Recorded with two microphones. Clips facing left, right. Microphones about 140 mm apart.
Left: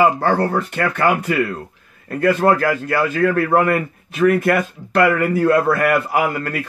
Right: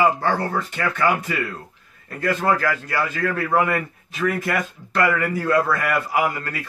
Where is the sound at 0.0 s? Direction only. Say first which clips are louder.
Left 4 dB; 60° left (ahead or behind).